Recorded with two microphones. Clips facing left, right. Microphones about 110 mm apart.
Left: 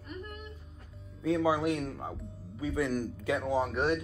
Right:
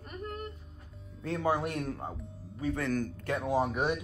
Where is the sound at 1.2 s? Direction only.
5° left (ahead or behind).